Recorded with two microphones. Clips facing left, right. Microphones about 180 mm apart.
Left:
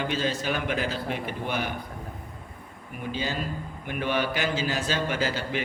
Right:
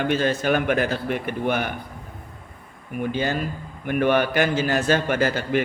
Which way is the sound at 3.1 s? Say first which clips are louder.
Right 4 dB; 55° right (ahead or behind).